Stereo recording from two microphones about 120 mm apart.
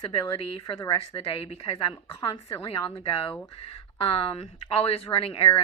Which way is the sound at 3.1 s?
45° left (ahead or behind).